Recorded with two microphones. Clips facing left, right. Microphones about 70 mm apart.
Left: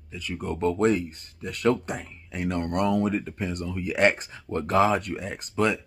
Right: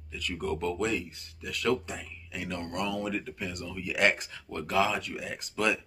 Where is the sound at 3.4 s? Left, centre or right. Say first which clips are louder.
Left 6 dB; left.